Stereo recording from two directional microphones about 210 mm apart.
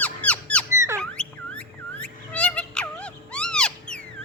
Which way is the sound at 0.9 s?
5° left (ahead or behind).